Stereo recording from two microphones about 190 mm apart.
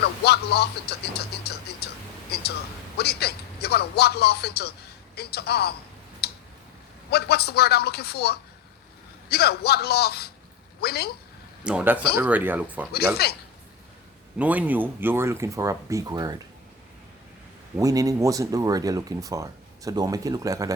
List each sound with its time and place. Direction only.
0.0 s music: 60° left (ahead or behind)
3.0 s speech: 60° left (ahead or behind)
6.2 s tick: 55° left (ahead or behind)
7.1 s speech: 60° left (ahead or behind)
11.6 s a man's voice: 5° right (ahead or behind)
13.2 s speech: 55° left (ahead or behind)
14.3 s speech: 10° right (ahead or behind)
17.7 s speech: 20° right (ahead or behind)